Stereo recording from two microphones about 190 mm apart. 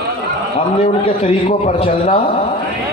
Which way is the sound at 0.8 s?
30° left (ahead or behind).